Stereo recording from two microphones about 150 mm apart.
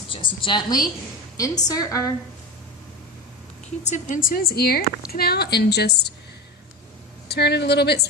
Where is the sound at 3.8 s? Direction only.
55° left (ahead or behind); by 6.1 s 90° left.